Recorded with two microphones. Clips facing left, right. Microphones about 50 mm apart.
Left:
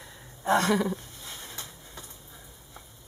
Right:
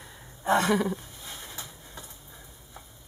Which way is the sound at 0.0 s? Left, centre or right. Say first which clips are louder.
Even; centre.